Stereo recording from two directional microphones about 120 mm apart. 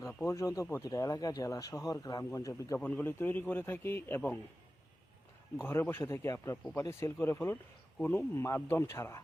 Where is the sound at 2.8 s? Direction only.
10° left (ahead or behind).